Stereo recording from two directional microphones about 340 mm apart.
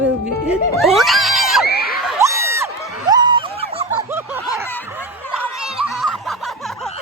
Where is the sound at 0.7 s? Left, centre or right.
Centre.